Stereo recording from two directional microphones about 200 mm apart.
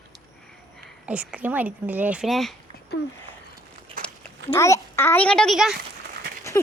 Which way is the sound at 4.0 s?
45° right (ahead or behind).